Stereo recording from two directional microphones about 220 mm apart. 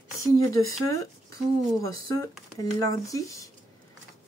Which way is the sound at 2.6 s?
15° left (ahead or behind).